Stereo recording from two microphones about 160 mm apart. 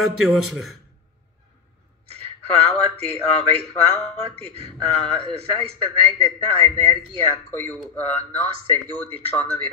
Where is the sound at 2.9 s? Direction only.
40° right (ahead or behind).